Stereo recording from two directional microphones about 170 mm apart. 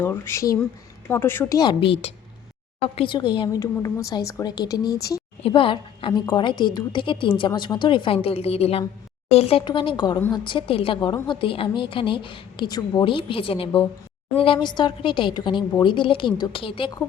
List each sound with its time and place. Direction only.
0.0 s a woman's voice: 15° left (ahead or behind)
5.4 s a woman's voice: 30° left (ahead or behind)